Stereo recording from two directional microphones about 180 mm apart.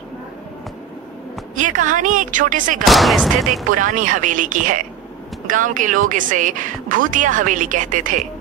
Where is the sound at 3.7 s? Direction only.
45° right (ahead or behind).